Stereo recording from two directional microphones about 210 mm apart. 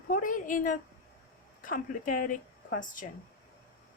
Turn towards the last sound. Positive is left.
turn(degrees=40)  # may be behind; listen again after turning